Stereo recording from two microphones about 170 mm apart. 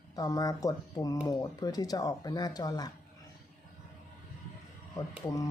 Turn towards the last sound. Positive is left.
turn(degrees=20)  # may be behind; listen again after turning